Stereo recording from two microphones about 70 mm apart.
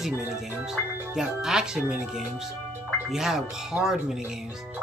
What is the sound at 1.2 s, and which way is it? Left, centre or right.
Speech, centre.